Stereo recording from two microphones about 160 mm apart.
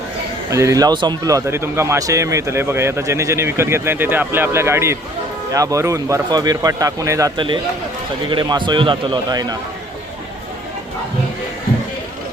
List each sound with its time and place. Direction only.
0.5 s speech: 20° right (ahead or behind)